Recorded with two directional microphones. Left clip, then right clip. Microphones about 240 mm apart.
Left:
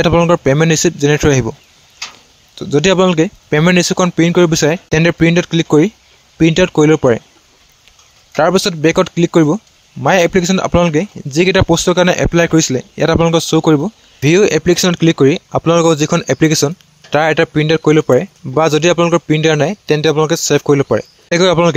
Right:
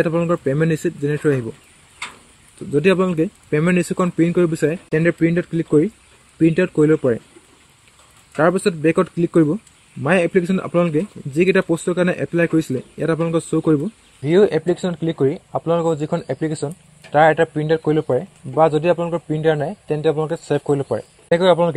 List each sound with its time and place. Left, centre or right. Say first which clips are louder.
0.0 s speech: left 8 dB; left
2.7 s speech: left 6 dB; left
8.4 s speech: left 5 dB; left